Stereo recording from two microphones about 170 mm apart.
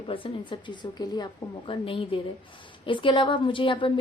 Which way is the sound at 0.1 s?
30° left (ahead or behind).